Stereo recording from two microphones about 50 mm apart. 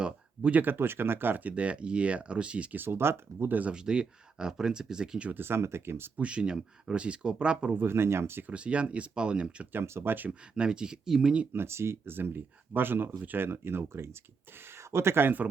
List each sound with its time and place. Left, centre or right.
0.0 s a sound: right
0.6 s speech: right
2.7 s speech: right
3.5 s speech: right
3.8 s speech: centre
5.3 s speech: right
6.1 s speech: right
7.8 s speech: right
8.4 s speech: right
9.7 s speech: right
10.5 s speech: centre
11.5 s speech: right
13.4 s speech: right